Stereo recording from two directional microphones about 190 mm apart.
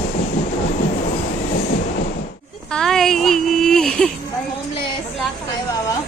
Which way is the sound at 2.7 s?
5° left (ahead or behind).